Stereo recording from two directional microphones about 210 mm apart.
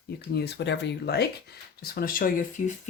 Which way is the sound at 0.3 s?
55° left (ahead or behind).